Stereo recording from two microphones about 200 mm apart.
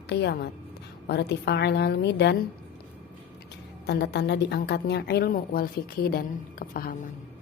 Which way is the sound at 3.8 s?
55° left (ahead or behind).